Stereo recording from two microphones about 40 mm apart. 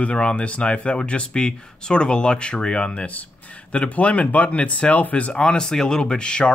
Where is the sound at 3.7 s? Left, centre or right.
Left.